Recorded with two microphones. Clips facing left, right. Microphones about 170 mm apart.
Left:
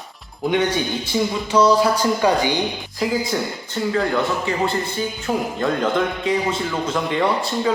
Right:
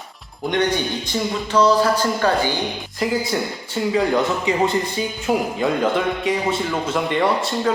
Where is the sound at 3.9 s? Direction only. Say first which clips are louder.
Right 2 dB; 15° right (ahead or behind).